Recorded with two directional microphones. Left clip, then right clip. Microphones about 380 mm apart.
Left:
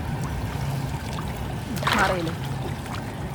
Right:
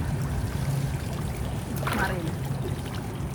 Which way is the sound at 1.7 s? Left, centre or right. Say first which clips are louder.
Left 7 dB; centre.